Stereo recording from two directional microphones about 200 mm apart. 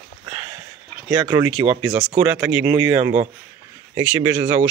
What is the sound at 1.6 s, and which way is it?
Speech, 25° right (ahead or behind).